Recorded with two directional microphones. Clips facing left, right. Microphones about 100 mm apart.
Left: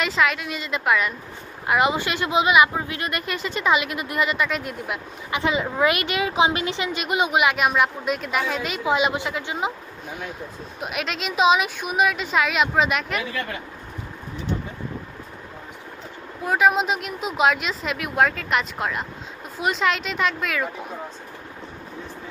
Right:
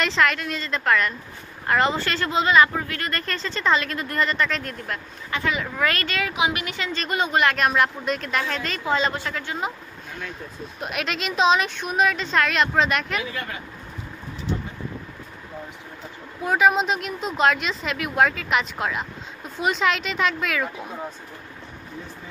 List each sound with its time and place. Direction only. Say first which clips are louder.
0.0 s speech: even; 5° left (ahead or behind)
5.4 s a woman's voice: left 4 dB; 20° left (ahead or behind)
6.3 s speech: left 6 dB; 30° left (ahead or behind)
10.8 s a woman's voice: even; centre (ahead or behind)
16.4 s a woman's voice: even; centre (ahead or behind)